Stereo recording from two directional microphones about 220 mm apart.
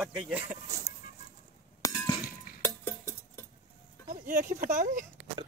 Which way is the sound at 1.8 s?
15° left (ahead or behind).